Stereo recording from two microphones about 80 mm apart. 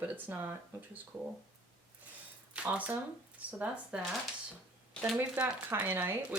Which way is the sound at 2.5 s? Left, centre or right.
Centre.